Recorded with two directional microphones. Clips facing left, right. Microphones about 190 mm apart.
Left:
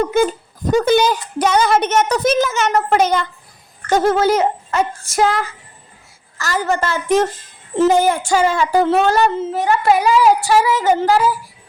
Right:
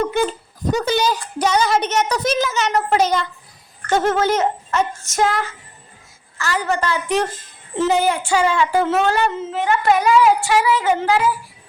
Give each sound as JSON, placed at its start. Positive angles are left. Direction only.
{"t": 0.1, "sound": "a sound", "side_deg": 45}
{"t": 3.8, "sound": "speech", "side_deg": 35}
{"t": 6.4, "sound": "a woman's voice", "side_deg": 40}